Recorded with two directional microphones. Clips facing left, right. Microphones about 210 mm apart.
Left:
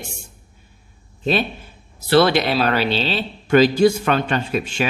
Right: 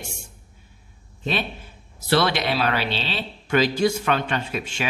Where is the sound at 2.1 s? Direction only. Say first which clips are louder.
Left 6 dB; 35° left (ahead or behind).